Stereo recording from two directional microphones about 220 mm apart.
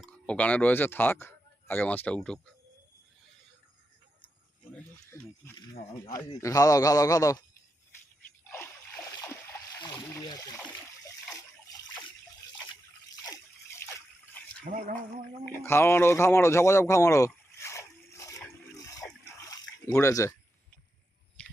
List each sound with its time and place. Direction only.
0.0 s speech: 5° left (ahead or behind)
6.1 s a man's voice: 15° left (ahead or behind)
8.4 s splash: 10° left (ahead or behind)
11.3 s water: 15° left (ahead or behind)
13.2 s water: 15° left (ahead or behind)
14.7 s a sound: 40° right (ahead or behind)
15.4 s speech: 10° left (ahead or behind)
18.8 s dog: 15° left (ahead or behind)
19.5 s a sound: 10° left (ahead or behind)
21.4 s chewing: 5° left (ahead or behind)